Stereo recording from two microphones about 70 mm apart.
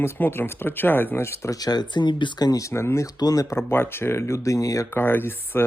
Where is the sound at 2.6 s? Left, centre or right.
Left.